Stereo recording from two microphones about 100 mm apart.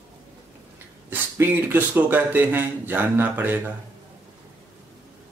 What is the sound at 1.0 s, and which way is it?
Speech, 20° right (ahead or behind).